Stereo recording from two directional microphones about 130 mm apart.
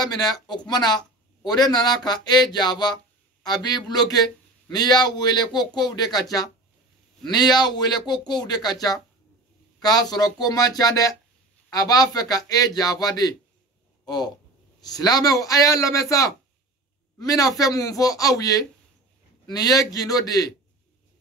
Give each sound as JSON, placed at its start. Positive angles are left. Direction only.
{"t": 0.0, "sound": "a man's voice", "side_deg": 30}